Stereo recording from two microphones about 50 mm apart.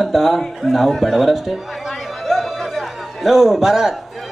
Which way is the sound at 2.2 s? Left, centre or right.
Centre.